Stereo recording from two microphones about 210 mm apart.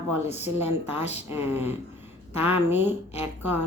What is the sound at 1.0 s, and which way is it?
Speech, 30° left (ahead or behind).